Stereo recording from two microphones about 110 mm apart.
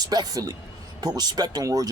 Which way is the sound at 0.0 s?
35° right (ahead or behind).